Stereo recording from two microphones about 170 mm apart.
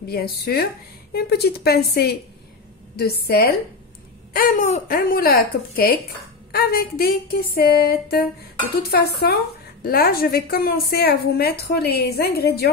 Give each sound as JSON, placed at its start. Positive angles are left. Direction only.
{"t": 0.0, "sound": "a woman's voice", "side_deg": 65}
{"t": 4.3, "sound": "speech", "side_deg": 55}